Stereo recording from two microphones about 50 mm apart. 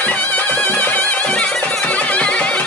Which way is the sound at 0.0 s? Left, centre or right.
Left.